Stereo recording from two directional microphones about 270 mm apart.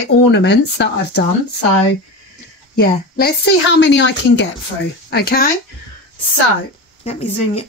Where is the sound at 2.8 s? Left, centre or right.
Left.